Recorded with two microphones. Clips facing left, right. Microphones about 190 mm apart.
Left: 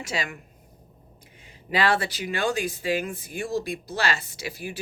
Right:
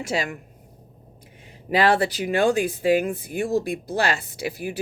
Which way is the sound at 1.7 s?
50° right (ahead or behind).